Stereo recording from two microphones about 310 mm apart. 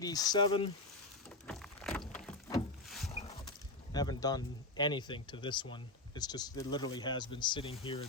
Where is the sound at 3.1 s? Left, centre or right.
Centre.